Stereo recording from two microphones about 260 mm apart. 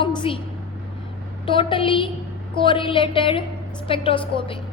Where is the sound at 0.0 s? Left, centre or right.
Centre.